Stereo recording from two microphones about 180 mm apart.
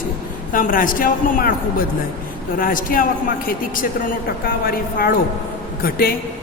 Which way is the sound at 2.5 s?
50° left (ahead or behind).